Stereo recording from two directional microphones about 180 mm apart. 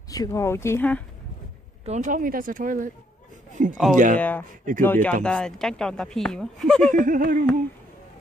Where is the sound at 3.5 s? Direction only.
45° right (ahead or behind).